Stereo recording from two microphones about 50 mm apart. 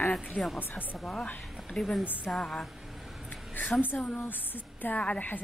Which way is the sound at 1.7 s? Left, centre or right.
Centre.